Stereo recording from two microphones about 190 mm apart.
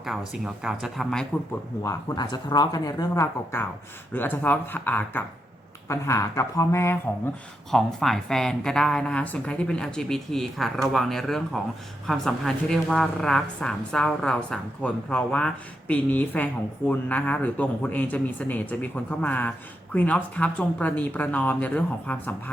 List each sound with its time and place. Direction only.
0.4 s speech: 5° right (ahead or behind)
1.8 s a man's voice: 15° left (ahead or behind)
7.7 s a man's voice: centre (ahead or behind)